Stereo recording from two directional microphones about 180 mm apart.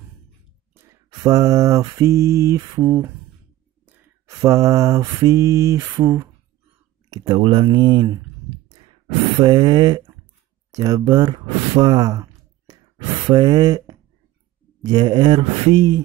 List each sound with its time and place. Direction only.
0.7 s mantra: 20° right (ahead or behind)
7.1 s speech: 25° right (ahead or behind)